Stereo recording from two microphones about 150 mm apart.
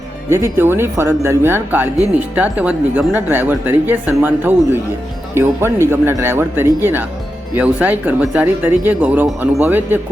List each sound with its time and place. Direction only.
0.3 s speech: 20° right (ahead or behind)